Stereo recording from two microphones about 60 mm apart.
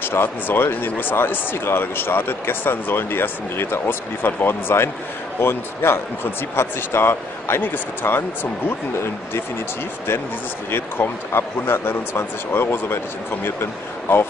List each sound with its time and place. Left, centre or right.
0.0 s speech: left
10.7 s speech: left